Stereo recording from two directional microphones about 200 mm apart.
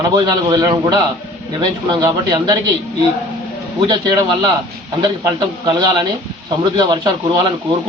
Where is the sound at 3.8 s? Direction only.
20° right (ahead or behind).